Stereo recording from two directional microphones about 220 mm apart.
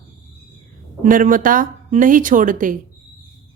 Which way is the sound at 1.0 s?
40° right (ahead or behind).